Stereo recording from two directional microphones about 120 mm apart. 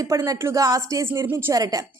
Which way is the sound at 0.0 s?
30° right (ahead or behind).